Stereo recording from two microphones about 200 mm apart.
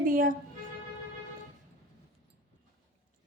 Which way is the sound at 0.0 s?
45° right (ahead or behind).